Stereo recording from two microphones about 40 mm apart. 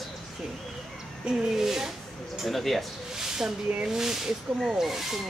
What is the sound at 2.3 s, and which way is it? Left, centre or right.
Speech, centre.